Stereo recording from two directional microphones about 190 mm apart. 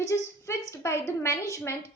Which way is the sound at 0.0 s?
15° left (ahead or behind).